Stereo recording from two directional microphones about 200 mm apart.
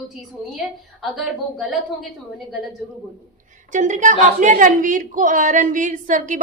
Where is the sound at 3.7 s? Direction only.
40° right (ahead or behind).